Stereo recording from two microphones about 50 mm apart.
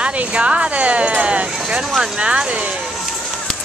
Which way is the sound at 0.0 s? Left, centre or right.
Right.